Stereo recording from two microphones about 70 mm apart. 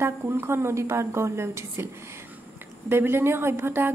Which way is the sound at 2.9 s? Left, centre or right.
Right.